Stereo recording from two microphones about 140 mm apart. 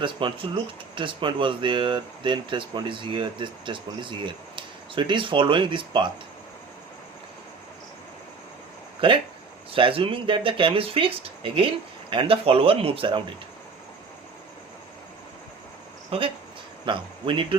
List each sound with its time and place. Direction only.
0.0 s speech: 35° right (ahead or behind)
9.0 s speech: 40° right (ahead or behind)
16.0 s speech: 40° right (ahead or behind)